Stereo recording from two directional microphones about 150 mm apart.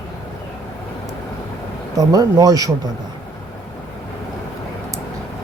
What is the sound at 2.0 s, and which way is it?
Speech, 25° right (ahead or behind).